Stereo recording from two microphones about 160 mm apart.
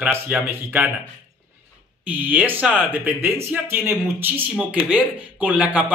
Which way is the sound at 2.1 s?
10° right (ahead or behind).